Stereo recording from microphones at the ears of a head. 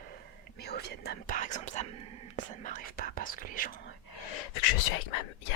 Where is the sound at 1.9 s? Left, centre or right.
Right.